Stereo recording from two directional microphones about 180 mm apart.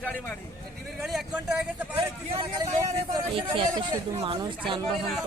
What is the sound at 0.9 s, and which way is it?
Speech, centre (ahead or behind).